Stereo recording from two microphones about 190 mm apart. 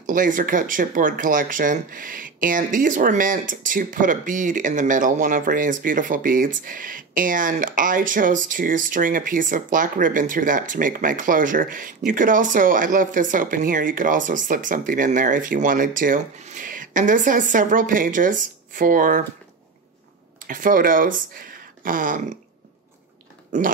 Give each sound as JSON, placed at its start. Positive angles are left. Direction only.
{"t": 0.0, "sound": "speech", "side_deg": -45}
{"t": 20.4, "sound": "speech", "side_deg": -45}